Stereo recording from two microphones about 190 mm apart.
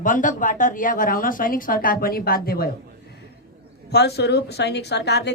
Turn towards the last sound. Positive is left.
turn(degrees=60)  # may be behind; listen again after turning